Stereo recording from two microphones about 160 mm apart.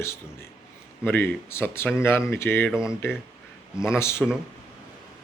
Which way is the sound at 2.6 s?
5° right (ahead or behind).